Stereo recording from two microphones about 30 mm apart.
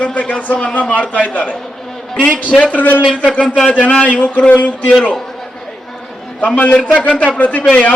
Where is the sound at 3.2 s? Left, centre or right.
Left.